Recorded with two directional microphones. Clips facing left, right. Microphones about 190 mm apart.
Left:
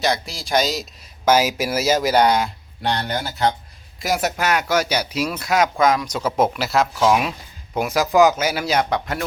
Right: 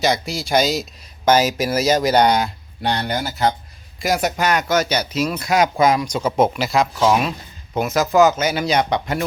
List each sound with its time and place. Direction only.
0.0 s speech: centre (ahead or behind)